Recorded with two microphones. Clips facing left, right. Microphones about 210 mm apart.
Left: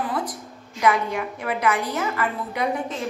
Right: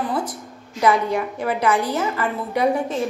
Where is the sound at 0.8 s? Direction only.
35° right (ahead or behind).